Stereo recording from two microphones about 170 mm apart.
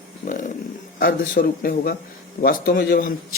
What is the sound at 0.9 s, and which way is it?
A man's voice, 55° left (ahead or behind).